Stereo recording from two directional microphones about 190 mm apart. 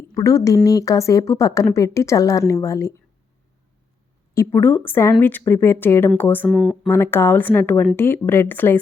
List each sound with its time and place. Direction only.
0.1 s speech: 15° left (ahead or behind)
4.4 s speech: 15° left (ahead or behind)
6.5 s speech: 5° right (ahead or behind)
6.8 s speech: 10° left (ahead or behind)